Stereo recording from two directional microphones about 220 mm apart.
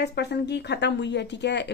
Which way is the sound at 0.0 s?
50° left (ahead or behind).